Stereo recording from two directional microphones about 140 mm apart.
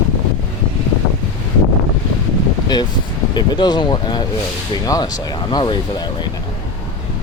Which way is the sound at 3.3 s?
30° left (ahead or behind).